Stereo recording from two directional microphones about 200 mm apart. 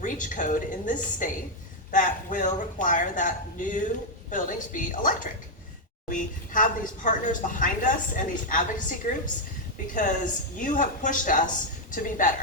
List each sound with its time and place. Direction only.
0.0 s a woman's voice: 40° left (ahead or behind)